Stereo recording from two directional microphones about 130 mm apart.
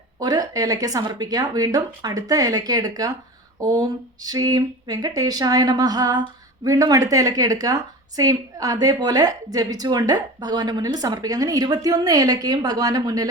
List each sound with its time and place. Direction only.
0.2 s speech: 30° right (ahead or behind)